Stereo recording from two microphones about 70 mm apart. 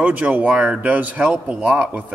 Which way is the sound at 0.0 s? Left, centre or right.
Right.